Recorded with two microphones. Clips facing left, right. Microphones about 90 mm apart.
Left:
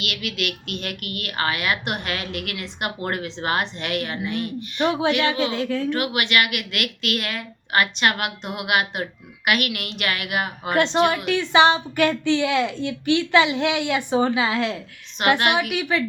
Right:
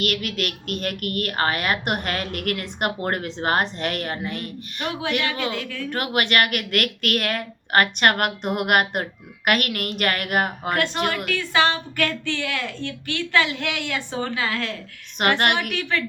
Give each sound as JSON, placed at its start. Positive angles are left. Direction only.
{"t": 0.0, "sound": "a woman's voice", "side_deg": -45}
{"t": 4.8, "sound": "a woman's voice", "side_deg": 30}
{"t": 5.9, "sound": "a woman's voice", "side_deg": -45}
{"t": 10.8, "sound": "a woman's voice", "side_deg": 25}
{"t": 15.2, "sound": "a woman's voice", "side_deg": -55}
{"t": 15.7, "sound": "a woman's voice", "side_deg": 15}